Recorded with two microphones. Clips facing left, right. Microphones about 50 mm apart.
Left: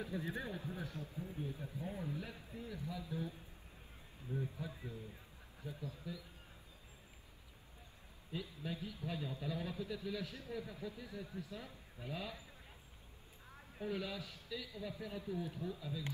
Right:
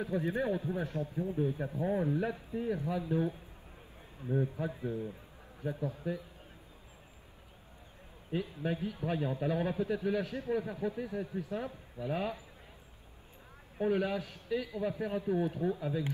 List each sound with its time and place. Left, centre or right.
0.0 s a man's voice: right
1.3 s a man's voice: right
8.3 s a man's voice: right
13.7 s a man's voice: right